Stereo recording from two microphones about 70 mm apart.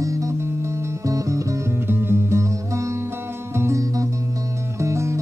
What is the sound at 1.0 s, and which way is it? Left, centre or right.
Music, right.